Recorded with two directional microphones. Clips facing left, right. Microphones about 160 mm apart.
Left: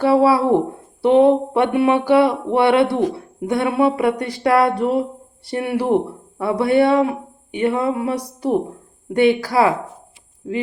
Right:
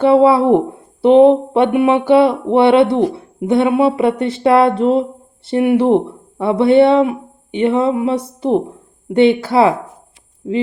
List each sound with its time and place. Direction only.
0.0 s speech: 20° right (ahead or behind)